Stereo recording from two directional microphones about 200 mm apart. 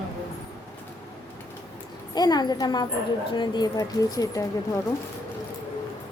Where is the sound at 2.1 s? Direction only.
20° left (ahead or behind).